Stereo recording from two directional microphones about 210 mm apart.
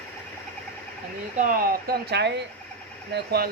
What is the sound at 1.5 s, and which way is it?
Speech, 45° right (ahead or behind).